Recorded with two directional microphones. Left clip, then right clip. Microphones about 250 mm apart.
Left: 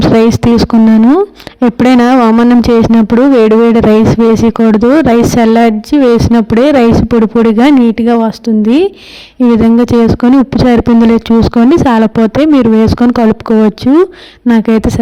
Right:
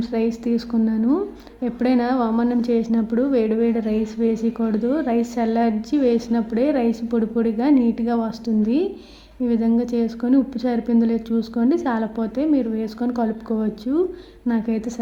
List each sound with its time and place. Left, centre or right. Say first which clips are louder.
0.0 s speech: left 16 dB; left